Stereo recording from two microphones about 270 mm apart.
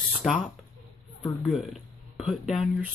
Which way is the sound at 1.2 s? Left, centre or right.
Centre.